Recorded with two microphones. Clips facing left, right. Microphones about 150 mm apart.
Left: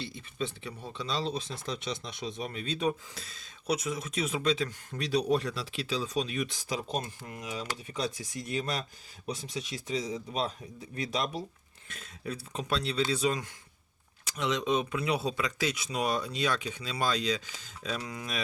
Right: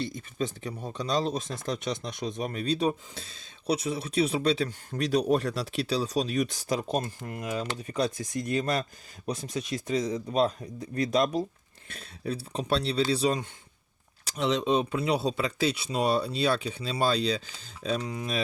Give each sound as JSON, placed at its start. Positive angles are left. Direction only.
{"t": 0.0, "sound": "speech", "side_deg": -40}
{"t": 11.9, "sound": "speech", "side_deg": -35}